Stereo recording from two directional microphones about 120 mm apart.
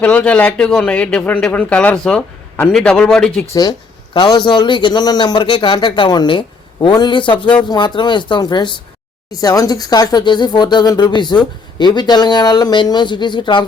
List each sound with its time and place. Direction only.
0.0 s a man's voice: 10° left (ahead or behind)
3.5 s speech: 35° left (ahead or behind)